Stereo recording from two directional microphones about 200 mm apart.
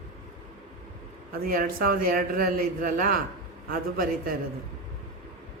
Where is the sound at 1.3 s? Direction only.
50° right (ahead or behind).